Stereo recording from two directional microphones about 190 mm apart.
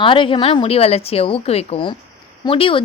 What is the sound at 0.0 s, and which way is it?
A woman's voice, 25° left (ahead or behind).